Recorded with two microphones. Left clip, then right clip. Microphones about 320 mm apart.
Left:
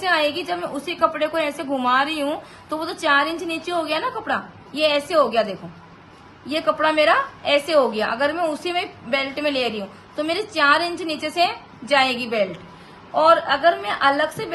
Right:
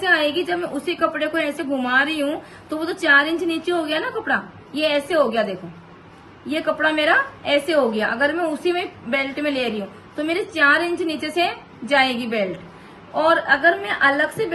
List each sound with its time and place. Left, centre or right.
0.0 s a woman's voice: left
3.5 s a woman's voice: left